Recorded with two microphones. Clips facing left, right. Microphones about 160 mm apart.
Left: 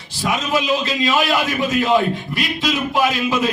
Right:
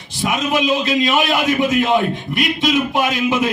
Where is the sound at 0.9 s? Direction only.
20° right (ahead or behind).